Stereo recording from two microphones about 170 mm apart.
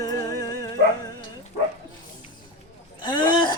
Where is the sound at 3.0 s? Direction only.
25° left (ahead or behind).